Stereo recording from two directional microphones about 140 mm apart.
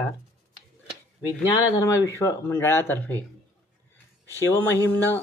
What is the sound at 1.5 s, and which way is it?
Speech, 20° left (ahead or behind).